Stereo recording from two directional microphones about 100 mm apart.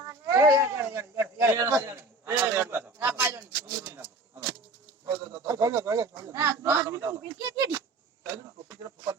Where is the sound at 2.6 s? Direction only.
20° right (ahead or behind).